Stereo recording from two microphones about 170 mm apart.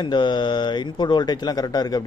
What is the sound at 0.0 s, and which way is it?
Speech, 25° left (ahead or behind).